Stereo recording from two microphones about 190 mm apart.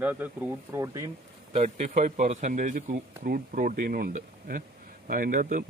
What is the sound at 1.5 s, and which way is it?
A man's voice, 35° right (ahead or behind).